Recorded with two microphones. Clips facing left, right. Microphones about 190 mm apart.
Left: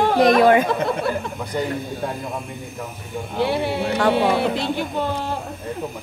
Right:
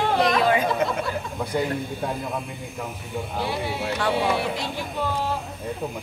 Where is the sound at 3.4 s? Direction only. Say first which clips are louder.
Left 8 dB; 65° left (ahead or behind).